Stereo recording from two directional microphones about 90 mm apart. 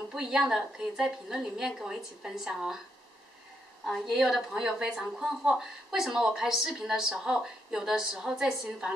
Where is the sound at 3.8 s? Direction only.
5° left (ahead or behind).